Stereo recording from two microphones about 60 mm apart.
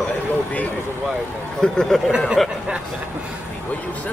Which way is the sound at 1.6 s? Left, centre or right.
Centre.